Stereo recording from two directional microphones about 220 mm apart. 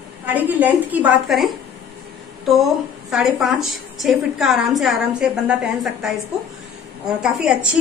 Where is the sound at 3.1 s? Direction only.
Centre (ahead or behind).